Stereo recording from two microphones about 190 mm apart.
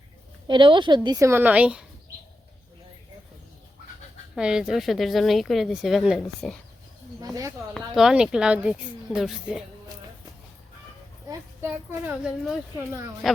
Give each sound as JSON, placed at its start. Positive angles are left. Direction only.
{"t": 0.4, "sound": "a woman's voice", "side_deg": -25}
{"t": 4.4, "sound": "speech", "side_deg": -5}
{"t": 7.2, "sound": "a woman's voice", "side_deg": -20}
{"t": 7.7, "sound": "speech", "side_deg": 0}
{"t": 11.9, "sound": "a child's voice", "side_deg": -10}